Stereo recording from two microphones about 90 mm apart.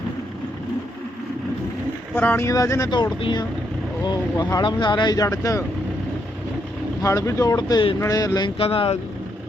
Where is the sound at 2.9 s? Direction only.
55° left (ahead or behind).